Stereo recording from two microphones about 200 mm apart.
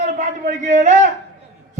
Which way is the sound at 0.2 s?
35° right (ahead or behind).